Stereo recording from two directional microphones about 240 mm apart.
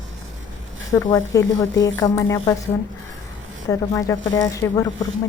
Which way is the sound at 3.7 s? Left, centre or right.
Centre.